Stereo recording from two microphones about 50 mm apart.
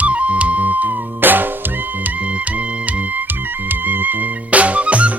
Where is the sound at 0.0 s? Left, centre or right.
Right.